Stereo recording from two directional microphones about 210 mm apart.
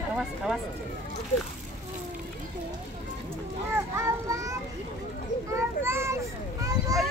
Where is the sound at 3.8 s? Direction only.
15° right (ahead or behind).